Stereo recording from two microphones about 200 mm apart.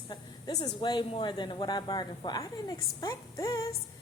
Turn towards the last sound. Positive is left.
turn(degrees=15)  # may be behind; listen again after turning